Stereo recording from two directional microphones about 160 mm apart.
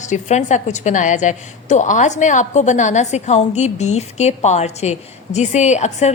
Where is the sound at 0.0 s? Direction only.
50° left (ahead or behind).